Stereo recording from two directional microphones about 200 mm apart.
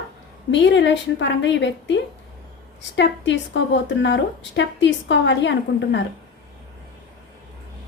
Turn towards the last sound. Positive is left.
turn(degrees=65)  # may be behind; listen again after turning